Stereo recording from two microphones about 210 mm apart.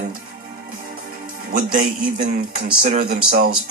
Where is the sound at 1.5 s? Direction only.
40° right (ahead or behind).